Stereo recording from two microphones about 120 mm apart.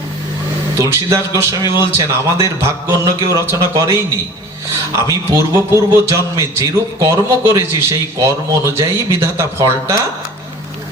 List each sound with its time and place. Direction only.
0.8 s a man's voice: 25° right (ahead or behind)